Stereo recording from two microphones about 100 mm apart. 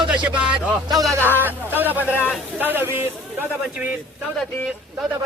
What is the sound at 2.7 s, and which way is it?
Speech, 20° right (ahead or behind).